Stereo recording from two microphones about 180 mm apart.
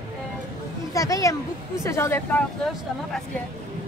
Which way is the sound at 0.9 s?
20° left (ahead or behind).